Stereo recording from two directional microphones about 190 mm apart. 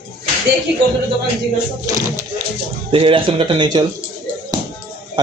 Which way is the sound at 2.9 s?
30° right (ahead or behind).